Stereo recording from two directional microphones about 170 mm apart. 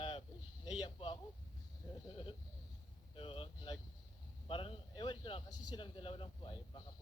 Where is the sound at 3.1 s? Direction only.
30° left (ahead or behind).